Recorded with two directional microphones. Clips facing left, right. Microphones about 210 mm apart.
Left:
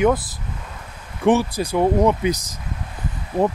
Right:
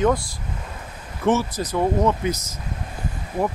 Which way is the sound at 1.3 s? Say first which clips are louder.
Left 3 dB; 15° left (ahead or behind).